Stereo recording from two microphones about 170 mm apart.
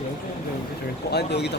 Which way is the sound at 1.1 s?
75° left (ahead or behind).